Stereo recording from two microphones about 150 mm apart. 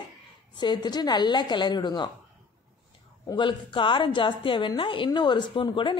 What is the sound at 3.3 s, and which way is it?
A woman's voice, 30° left (ahead or behind).